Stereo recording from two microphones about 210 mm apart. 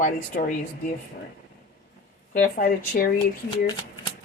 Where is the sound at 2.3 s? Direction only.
40° left (ahead or behind).